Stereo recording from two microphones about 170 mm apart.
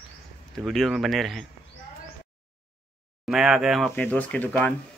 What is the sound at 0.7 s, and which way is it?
Speech, centre (ahead or behind).